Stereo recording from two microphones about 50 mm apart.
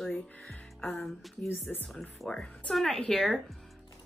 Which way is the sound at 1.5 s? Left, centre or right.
Left.